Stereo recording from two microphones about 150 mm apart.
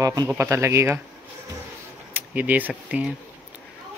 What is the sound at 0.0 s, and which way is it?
Speech, 25° right (ahead or behind).